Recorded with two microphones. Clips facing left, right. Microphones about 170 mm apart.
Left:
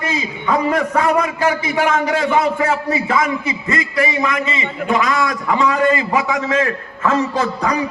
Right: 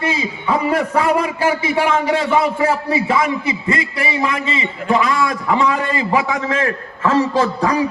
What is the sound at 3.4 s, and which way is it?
A man's voice, 30° right (ahead or behind).